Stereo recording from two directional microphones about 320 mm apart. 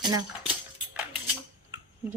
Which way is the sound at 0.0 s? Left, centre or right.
Centre.